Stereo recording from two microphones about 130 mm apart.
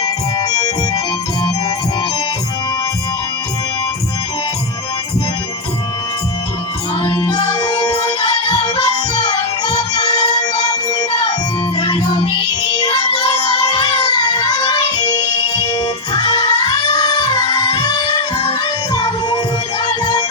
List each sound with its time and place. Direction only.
0.0 s music: 30° left (ahead or behind)
7.0 s music: 30° left (ahead or behind)